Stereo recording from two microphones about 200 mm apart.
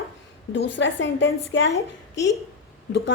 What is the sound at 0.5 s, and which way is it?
A woman's voice, 65° left (ahead or behind).